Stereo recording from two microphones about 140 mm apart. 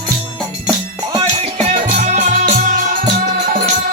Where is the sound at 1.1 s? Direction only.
45° right (ahead or behind); by 3.1 s 60° right (ahead or behind).